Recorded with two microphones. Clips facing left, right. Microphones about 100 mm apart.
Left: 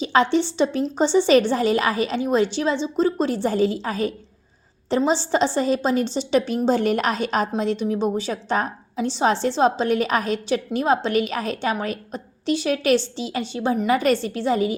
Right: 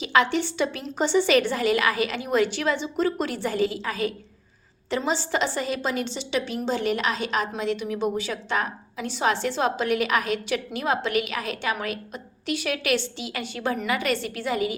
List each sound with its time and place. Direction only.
0.0 s a woman's voice: 30° left (ahead or behind)
13.9 s a woman's voice: 35° left (ahead or behind)